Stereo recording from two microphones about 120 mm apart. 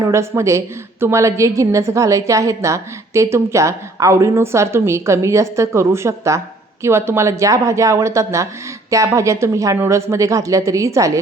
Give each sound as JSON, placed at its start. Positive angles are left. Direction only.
{"t": 0.0, "sound": "a woman's voice", "side_deg": -25}